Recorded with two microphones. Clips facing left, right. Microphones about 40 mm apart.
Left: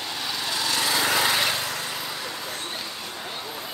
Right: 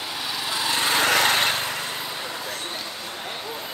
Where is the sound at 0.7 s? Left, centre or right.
Right.